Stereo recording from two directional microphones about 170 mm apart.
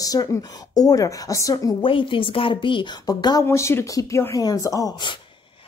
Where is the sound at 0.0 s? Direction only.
20° left (ahead or behind).